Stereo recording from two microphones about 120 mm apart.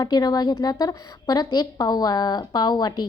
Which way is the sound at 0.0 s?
35° left (ahead or behind).